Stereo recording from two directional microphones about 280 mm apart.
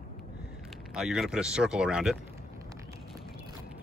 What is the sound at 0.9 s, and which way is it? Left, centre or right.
Speech, centre.